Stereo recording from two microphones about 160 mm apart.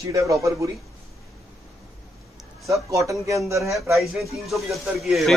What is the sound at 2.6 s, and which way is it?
Speech, 20° right (ahead or behind).